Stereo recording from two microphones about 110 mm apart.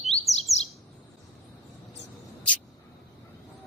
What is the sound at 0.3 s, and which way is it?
Chirp, 75° left (ahead or behind).